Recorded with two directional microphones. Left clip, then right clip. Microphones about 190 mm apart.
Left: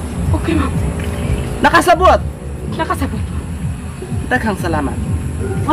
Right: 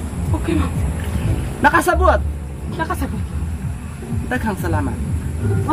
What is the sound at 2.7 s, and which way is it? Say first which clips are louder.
Speech: left 4 dB; 10° left (ahead or behind).